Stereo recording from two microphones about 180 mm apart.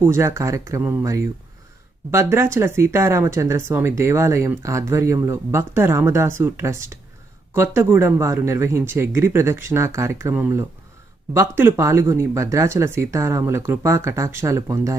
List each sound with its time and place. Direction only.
0.0 s speech: 15° right (ahead or behind)